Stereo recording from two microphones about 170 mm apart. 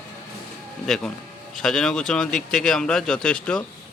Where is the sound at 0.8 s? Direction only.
Centre (ahead or behind).